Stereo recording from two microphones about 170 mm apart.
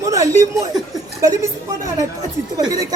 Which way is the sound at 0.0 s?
20° right (ahead or behind).